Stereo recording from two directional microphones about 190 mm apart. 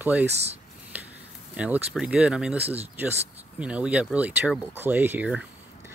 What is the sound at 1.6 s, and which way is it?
Speech, 10° right (ahead or behind).